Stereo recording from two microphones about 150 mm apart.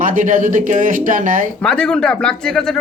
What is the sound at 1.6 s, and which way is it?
A woman's voice, 5° left (ahead or behind).